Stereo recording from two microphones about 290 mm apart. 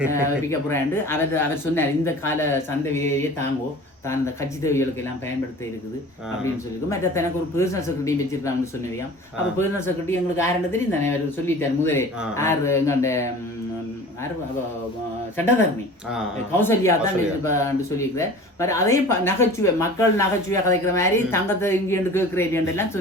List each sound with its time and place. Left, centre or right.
0.7 s speech: centre
4.6 s speech: centre
6.9 s speech: centre
9.6 s speech: centre
15.4 s speech: centre